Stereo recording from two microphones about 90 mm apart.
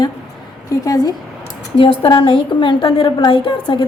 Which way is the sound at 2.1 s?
60° left (ahead or behind).